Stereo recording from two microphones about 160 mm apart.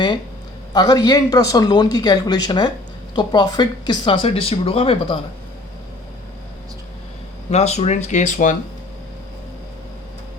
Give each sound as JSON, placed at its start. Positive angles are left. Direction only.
{"t": 0.7, "sound": "speech", "side_deg": 25}
{"t": 7.5, "sound": "speech", "side_deg": 40}